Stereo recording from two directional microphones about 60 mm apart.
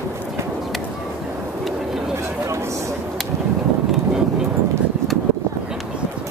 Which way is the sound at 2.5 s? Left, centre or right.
Right.